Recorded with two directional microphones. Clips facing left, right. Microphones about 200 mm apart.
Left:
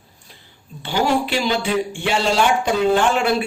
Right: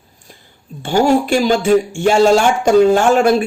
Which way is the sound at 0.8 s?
45° right (ahead or behind).